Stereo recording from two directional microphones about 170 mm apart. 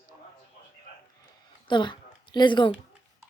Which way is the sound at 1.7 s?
30° left (ahead or behind).